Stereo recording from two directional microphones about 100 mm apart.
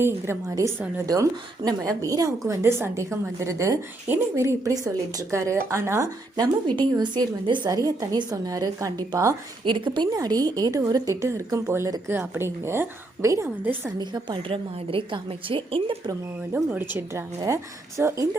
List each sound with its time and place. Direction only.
0.0 s a woman's voice: 25° right (ahead or behind)
1.0 s a woman's voice: 35° right (ahead or behind)
6.3 s a woman's voice: 45° right (ahead or behind)
7.7 s a woman's voice: 40° right (ahead or behind)
9.6 s a woman's voice: 55° right (ahead or behind); by 13.5 s 30° right (ahead or behind)
14.0 s a woman's voice: 50° right (ahead or behind)
16.6 s a woman's voice: 20° right (ahead or behind)